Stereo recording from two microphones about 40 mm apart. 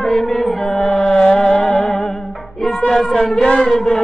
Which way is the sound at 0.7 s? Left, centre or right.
Centre.